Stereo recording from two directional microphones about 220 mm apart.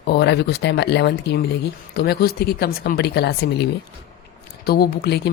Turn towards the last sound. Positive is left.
turn(degrees=45)  # may be behind; listen again after turning